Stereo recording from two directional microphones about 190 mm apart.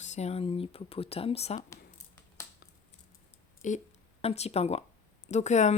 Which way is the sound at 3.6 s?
40° left (ahead or behind).